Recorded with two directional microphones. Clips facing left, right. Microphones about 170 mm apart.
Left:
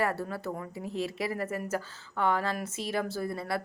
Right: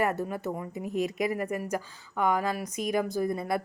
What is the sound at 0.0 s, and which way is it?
A woman's voice, 20° right (ahead or behind).